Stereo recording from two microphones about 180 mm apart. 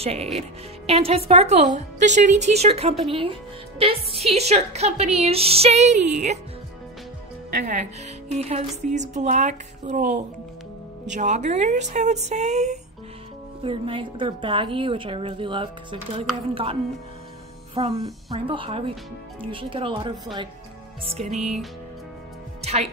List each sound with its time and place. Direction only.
0.0 s speech: 35° right (ahead or behind)
8.3 s speech: 35° right (ahead or behind)
11.1 s speech: 40° right (ahead or behind)
13.7 s a woman's voice: 30° right (ahead or behind)
17.7 s speech: 35° right (ahead or behind)
18.0 s a woman's voice: 25° right (ahead or behind)
22.6 s speech: 35° right (ahead or behind)